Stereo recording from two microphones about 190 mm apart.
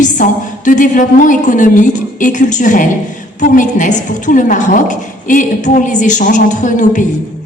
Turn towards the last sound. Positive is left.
turn(degrees=40)  # may be behind; listen again after turning